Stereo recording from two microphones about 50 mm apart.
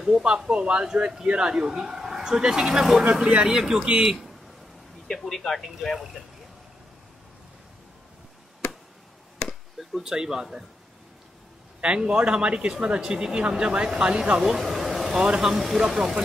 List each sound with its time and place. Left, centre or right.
0.0 s speech: centre
5.2 s speech: centre
9.8 s speech: centre
11.8 s speech: centre
14.4 s a sound: centre
15.1 s speech: centre
15.8 s speech: centre